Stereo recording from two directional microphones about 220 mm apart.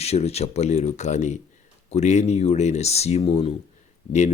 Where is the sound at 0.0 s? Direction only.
30° left (ahead or behind).